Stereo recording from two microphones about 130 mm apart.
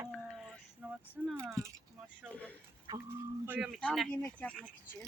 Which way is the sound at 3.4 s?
15° right (ahead or behind).